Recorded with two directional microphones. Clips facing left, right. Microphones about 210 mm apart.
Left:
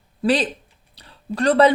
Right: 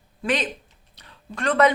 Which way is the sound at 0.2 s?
35° left (ahead or behind).